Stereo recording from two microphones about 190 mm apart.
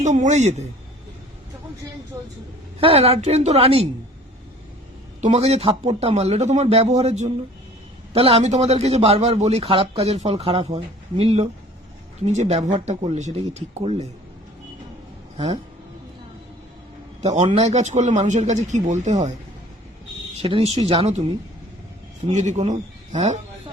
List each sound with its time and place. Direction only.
0.0 s a man's voice: 40° right (ahead or behind)
2.8 s a man's voice: 30° right (ahead or behind)
5.2 s a man's voice: 35° right (ahead or behind)
17.3 s a man's voice: 35° right (ahead or behind)
20.4 s a man's voice: 30° right (ahead or behind)